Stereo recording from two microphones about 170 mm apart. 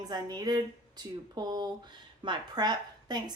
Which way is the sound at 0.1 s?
25° right (ahead or behind).